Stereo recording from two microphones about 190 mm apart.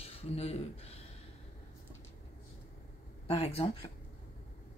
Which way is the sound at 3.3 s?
30° left (ahead or behind).